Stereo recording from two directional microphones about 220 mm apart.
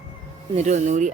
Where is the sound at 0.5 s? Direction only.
30° right (ahead or behind).